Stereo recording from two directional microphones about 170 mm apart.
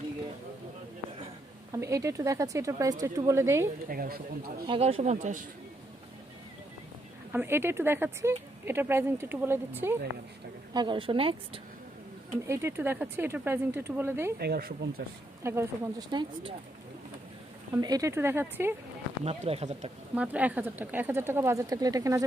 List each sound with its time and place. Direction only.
1.7 s speech: 20° right (ahead or behind)
3.8 s speech: 60° right (ahead or behind)
4.6 s a woman's voice: 35° right (ahead or behind)
7.3 s speech: 15° right (ahead or behind)
10.7 s a woman's voice: 25° right (ahead or behind)
12.4 s speech: 15° right (ahead or behind)
14.4 s speech: 65° right (ahead or behind)
15.4 s speech: 15° right (ahead or behind)
16.1 s speech: 25° right (ahead or behind)
17.7 s speech: 20° right (ahead or behind)
19.2 s a woman's voice: 40° right (ahead or behind)
20.2 s speech: 10° right (ahead or behind)